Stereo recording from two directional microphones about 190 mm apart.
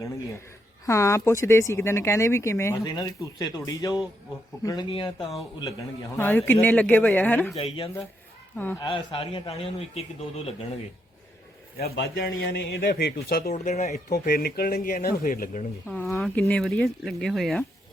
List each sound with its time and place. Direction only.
0.9 s speech: 15° left (ahead or behind)
6.1 s speech: 10° left (ahead or behind)
7.5 s speech: 30° left (ahead or behind)
8.5 s speech: 10° left (ahead or behind)
8.8 s a man's voice: 25° left (ahead or behind)
11.9 s speech: 60° left (ahead or behind)
13.5 s a man's voice: 35° left (ahead or behind)
14.1 s speech: 55° left (ahead or behind)
15.9 s speech: 5° left (ahead or behind)